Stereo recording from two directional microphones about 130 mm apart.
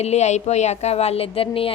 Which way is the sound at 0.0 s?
60° left (ahead or behind).